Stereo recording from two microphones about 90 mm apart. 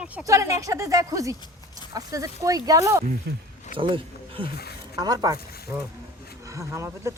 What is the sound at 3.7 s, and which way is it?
Speech, 75° right (ahead or behind).